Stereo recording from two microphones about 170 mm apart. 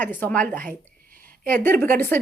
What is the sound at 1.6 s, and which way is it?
Speech, 10° left (ahead or behind).